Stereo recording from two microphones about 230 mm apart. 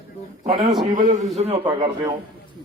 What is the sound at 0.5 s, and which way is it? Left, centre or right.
Speech, centre.